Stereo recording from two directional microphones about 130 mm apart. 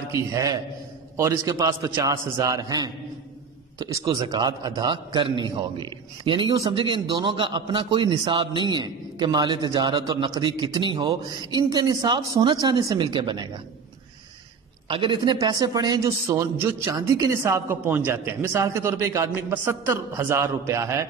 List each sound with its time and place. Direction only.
0.1 s a man's voice: 25° right (ahead or behind)
14.9 s a man's voice: 40° right (ahead or behind); by 21.1 s 25° right (ahead or behind)